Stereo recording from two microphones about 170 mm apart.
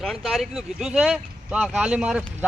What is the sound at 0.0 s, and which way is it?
Speech, centre (ahead or behind).